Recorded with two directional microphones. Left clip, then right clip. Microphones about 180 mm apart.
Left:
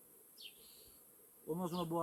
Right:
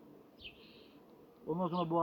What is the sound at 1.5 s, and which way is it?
Speech, 10° left (ahead or behind).